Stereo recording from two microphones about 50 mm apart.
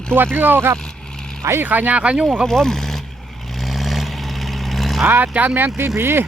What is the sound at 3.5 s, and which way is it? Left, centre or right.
Vehicle, centre.